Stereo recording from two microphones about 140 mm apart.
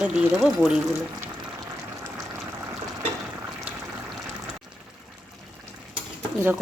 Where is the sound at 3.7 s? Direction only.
10° right (ahead or behind).